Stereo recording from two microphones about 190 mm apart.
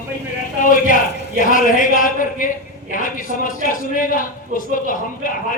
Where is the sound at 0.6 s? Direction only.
45° left (ahead or behind).